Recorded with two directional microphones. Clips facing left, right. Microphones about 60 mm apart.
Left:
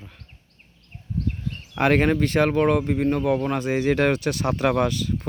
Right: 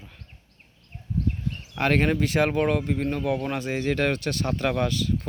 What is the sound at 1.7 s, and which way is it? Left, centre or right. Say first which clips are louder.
Speech: left 4 dB; centre.